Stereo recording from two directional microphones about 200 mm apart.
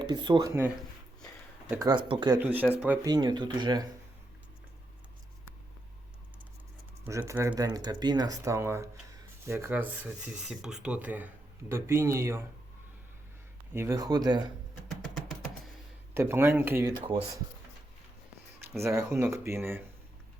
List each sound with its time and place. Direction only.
0.0 s speech: 20° right (ahead or behind)
1.8 s speech: 20° right (ahead or behind)
2.4 s speech: 10° right (ahead or behind)
3.1 s speech: 20° right (ahead or behind)
7.0 s speech: 10° right (ahead or behind)
13.7 s speech: 15° right (ahead or behind)
14.8 s a sound: centre (ahead or behind)
16.1 s speech: 10° right (ahead or behind)
17.0 s speech: 25° right (ahead or behind)
18.8 s speech: 15° right (ahead or behind)